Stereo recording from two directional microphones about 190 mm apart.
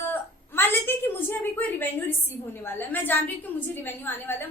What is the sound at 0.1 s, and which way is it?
A woman's voice, 10° left (ahead or behind).